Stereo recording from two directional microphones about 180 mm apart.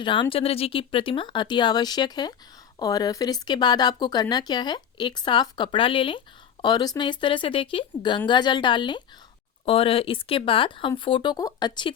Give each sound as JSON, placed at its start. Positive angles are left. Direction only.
{"t": 0.0, "sound": "speech", "side_deg": 25}